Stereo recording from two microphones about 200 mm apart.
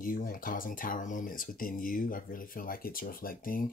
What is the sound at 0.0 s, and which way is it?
Speech, 45° left (ahead or behind).